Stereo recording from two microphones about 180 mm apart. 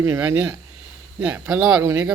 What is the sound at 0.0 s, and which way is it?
A man's voice, 15° right (ahead or behind).